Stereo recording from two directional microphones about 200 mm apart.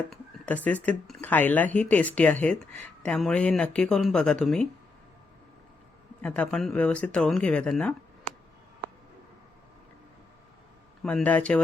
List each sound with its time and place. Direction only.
0.1 s speech: 5° left (ahead or behind)
6.2 s speech: 5° left (ahead or behind)
11.0 s speech: 5° left (ahead or behind)